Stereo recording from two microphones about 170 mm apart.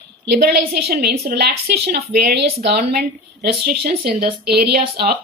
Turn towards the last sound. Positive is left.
turn(degrees=-65)  # may be behind; listen again after turning